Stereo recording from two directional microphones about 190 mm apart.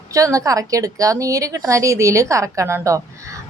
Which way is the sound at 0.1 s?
15° right (ahead or behind).